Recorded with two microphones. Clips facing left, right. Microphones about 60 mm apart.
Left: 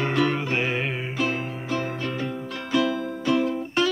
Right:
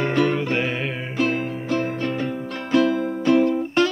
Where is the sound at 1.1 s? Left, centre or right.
Right.